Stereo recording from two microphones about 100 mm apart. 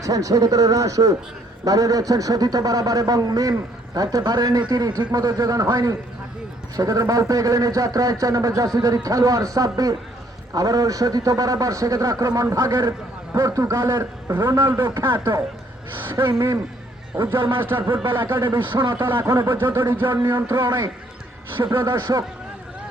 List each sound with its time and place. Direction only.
0.0 s a man's voice: 35° right (ahead or behind)
14.8 s speech: 50° right (ahead or behind)
15.2 s a man's voice: 30° right (ahead or behind)
17.1 s a man's voice: 10° right (ahead or behind)
17.6 s a man's voice: 20° right (ahead or behind)
18.0 s speech: 55° right (ahead or behind)
18.9 s a man's voice: 20° right (ahead or behind)
21.8 s speech: 50° right (ahead or behind)